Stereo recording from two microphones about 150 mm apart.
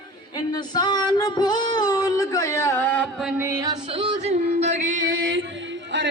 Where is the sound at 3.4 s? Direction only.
20° right (ahead or behind).